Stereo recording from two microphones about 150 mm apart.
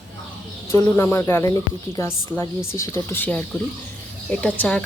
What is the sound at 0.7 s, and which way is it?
Speech, 20° left (ahead or behind).